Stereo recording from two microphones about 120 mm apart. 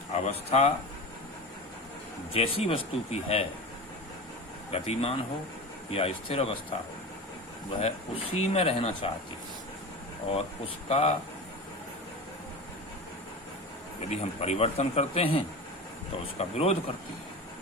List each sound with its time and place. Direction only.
0.3 s speech: 60° left (ahead or behind)
2.3 s speech: 55° left (ahead or behind)
4.7 s speech: 55° left (ahead or behind)
7.8 s speech: 55° left (ahead or behind)
10.8 s speech: 60° left (ahead or behind)
14.1 s speech: 60° left (ahead or behind)